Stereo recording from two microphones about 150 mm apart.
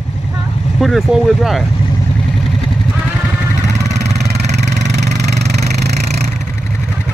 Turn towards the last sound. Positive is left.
turn(degrees=-90)